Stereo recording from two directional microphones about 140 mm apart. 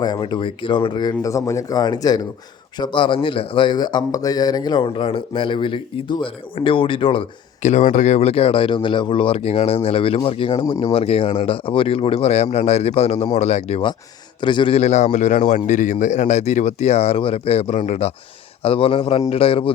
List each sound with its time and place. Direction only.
0.0 s a man's voice: 30° left (ahead or behind)
7.6 s a man's voice: 60° left (ahead or behind)
14.4 s a man's voice: 35° left (ahead or behind)
14.8 s a man's voice: 55° left (ahead or behind)
18.6 s a man's voice: 40° left (ahead or behind)